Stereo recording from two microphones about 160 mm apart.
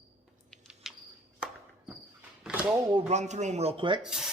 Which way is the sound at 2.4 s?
5° right (ahead or behind).